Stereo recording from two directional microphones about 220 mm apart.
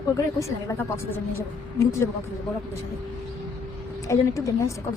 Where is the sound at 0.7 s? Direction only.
10° left (ahead or behind).